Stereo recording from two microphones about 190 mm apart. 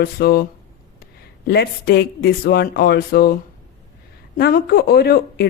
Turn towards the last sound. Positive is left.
turn(degrees=60)  # may be behind; listen again after turning